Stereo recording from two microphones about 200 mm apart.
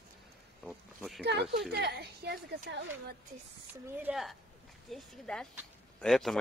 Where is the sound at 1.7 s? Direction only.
55° right (ahead or behind).